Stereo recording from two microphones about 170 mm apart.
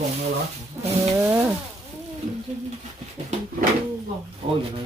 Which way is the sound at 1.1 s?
15° right (ahead or behind).